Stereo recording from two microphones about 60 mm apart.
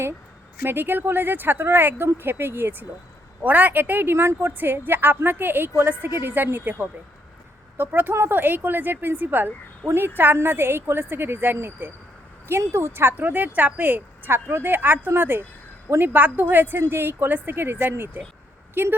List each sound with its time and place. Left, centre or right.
0.6 s speech: right
3.4 s a woman's voice: right
12.5 s speech: right